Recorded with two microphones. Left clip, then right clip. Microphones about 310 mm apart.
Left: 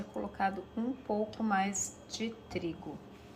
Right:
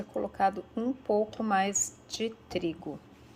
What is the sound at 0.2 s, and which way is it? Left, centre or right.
A woman's voice, right.